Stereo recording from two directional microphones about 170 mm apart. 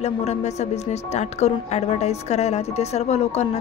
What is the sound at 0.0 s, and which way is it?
A woman's voice, 40° left (ahead or behind).